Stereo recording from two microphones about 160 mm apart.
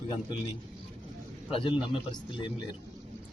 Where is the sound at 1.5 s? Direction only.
35° left (ahead or behind).